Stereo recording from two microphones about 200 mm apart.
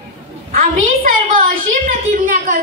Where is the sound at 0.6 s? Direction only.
40° right (ahead or behind).